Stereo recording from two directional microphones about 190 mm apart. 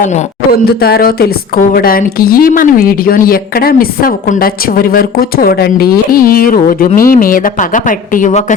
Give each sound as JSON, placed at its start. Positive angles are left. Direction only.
{"t": 0.5, "sound": "a woman's voice", "side_deg": 55}